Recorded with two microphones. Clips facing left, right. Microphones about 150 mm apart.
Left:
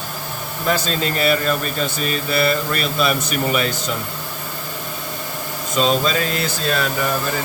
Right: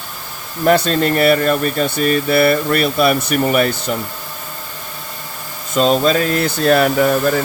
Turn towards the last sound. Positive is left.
turn(degrees=-65)  # may be behind; listen again after turning